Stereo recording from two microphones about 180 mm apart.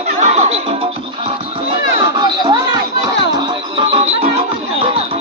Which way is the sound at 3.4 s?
30° right (ahead or behind).